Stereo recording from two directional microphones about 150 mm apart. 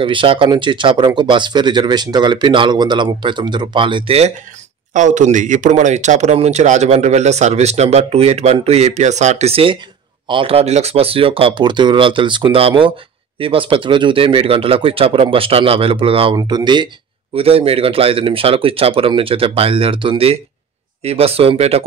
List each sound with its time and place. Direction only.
0.0 s speech: 35° right (ahead or behind)
4.9 s a man's voice: 55° right (ahead or behind)